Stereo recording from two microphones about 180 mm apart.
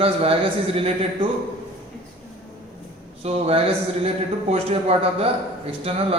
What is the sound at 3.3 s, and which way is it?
A man's voice, 35° right (ahead or behind).